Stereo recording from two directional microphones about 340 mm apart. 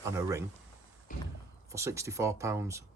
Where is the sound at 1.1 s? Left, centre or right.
Left.